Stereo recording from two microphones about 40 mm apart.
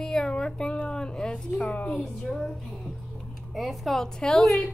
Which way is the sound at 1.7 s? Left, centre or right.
Left.